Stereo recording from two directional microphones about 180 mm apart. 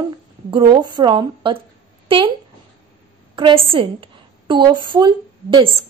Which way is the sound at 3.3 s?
30° right (ahead or behind).